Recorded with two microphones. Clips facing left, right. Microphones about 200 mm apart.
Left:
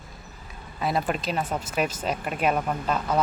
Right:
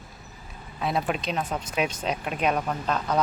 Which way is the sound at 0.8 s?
Centre (ahead or behind).